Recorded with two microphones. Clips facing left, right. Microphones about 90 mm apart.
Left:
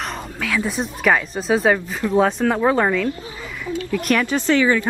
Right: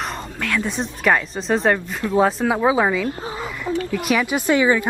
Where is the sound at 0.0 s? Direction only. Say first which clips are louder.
Even; centre (ahead or behind).